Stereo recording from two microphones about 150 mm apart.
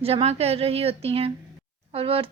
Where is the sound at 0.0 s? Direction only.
40° right (ahead or behind).